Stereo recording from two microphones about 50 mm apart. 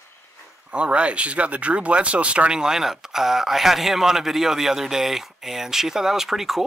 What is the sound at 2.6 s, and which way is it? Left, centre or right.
Speech, centre.